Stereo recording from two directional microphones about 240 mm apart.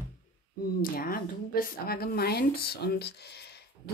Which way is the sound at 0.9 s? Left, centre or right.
Left.